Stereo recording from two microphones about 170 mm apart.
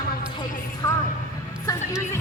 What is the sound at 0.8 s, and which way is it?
Speech, 25° left (ahead or behind).